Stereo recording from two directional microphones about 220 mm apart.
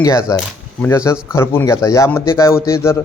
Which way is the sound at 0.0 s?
15° left (ahead or behind).